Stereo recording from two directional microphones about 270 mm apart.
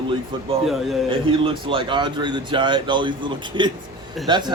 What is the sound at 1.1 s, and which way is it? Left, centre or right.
Speech, centre.